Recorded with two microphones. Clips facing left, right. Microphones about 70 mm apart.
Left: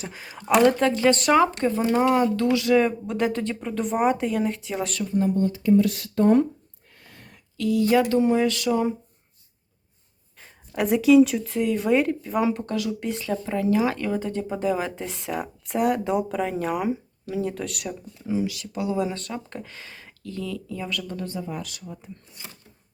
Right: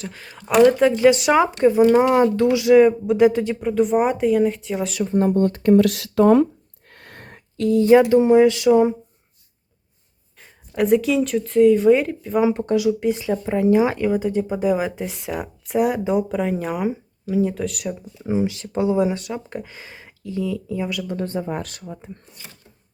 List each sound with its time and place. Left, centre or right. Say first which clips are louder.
0.0 s speech: right 1 dB; centre
0.6 s speech: right 7 dB; centre
5.0 s speech: right 5 dB; right
6.9 s speech: right 7 dB; right
10.8 s speech: left 1 dB; centre
12.5 s speech: right 7 dB; centre
18.2 s speech: right 4 dB; right
21.2 s speech: right 6 dB; right